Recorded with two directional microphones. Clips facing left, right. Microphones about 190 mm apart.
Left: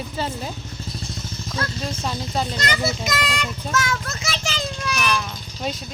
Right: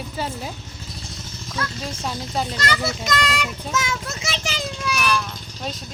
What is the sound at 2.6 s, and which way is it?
Speech, 15° left (ahead or behind).